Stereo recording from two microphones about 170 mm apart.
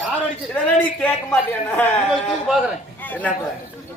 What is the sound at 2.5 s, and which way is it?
Speech, 5° right (ahead or behind).